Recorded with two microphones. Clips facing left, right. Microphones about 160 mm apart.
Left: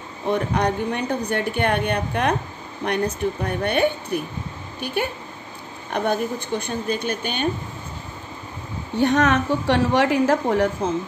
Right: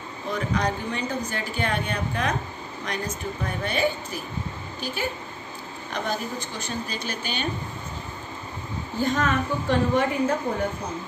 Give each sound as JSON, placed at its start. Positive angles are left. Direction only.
{"t": 0.3, "sound": "a woman's voice", "side_deg": 60}
{"t": 8.9, "sound": "a woman's voice", "side_deg": 70}